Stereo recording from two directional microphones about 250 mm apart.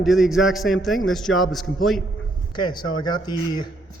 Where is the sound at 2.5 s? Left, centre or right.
Centre.